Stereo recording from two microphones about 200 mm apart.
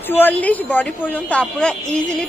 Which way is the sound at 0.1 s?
10° left (ahead or behind).